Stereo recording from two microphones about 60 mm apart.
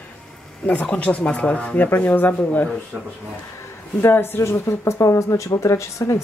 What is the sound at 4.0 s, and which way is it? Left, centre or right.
Speech, left.